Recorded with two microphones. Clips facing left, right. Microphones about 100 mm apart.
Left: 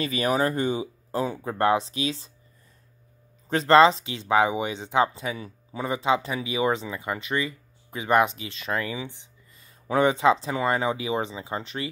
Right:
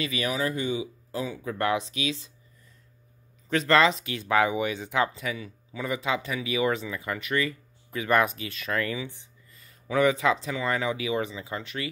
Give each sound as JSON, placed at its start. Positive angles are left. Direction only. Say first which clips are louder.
{"t": 0.0, "sound": "speech", "louder": "left 4 dB", "side_deg": 40}
{"t": 3.4, "sound": "speech", "louder": "left 5 dB", "side_deg": 30}